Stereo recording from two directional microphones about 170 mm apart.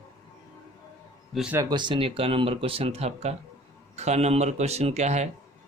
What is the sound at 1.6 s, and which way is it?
Speech, 25° right (ahead or behind).